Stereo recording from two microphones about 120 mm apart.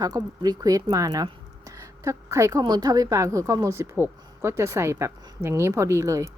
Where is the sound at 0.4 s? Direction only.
30° right (ahead or behind).